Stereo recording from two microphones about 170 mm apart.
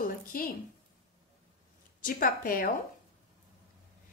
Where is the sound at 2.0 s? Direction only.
55° left (ahead or behind).